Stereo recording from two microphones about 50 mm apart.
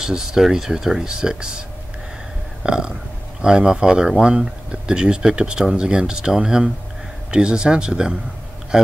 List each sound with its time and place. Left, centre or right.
0.0 s speech: centre
2.6 s burping: centre
3.4 s speech: centre